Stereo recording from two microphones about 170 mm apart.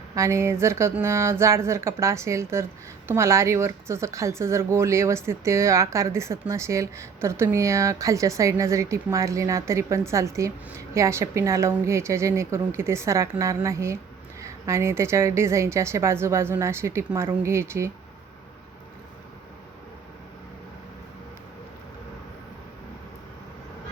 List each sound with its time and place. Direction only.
0.1 s a woman's voice: 15° right (ahead or behind)